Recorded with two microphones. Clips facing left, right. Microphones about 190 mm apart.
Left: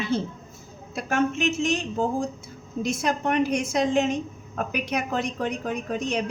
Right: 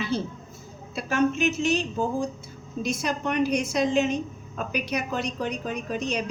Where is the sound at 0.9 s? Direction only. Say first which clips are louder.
Left 1 dB; 50° left (ahead or behind).